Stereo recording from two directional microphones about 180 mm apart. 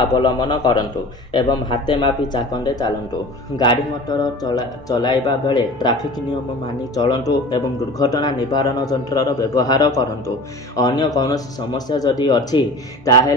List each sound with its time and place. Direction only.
0.1 s speech: 25° left (ahead or behind)
7.0 s speech: 20° left (ahead or behind)